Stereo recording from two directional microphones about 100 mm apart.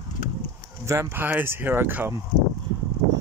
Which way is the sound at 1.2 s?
20° right (ahead or behind).